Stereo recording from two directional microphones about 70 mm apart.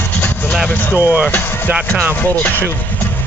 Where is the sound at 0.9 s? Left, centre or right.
Right.